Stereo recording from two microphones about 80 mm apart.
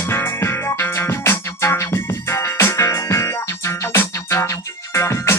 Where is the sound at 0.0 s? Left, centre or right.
Left.